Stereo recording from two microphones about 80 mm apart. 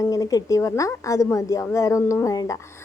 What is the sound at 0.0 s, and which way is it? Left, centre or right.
A woman's voice, left.